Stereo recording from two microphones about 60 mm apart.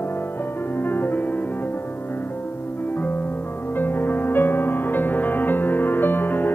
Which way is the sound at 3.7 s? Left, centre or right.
Left.